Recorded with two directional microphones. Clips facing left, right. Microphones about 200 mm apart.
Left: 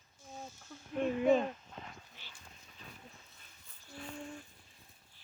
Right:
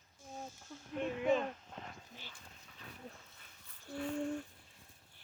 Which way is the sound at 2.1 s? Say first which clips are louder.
Right 4 dB; 50° right (ahead or behind).